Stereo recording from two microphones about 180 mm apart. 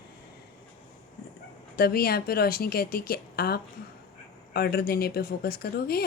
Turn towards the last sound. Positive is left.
turn(degrees=60)  # may be behind; listen again after turning